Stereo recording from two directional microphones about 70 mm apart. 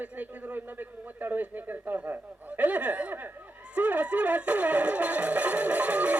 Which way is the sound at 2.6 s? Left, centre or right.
Right.